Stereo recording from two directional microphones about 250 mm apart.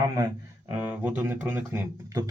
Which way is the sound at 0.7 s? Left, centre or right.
Centre.